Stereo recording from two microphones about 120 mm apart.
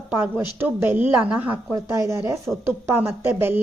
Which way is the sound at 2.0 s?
25° right (ahead or behind).